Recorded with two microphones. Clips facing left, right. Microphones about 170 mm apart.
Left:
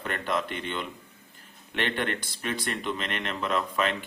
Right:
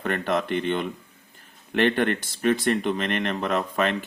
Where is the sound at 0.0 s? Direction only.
45° right (ahead or behind).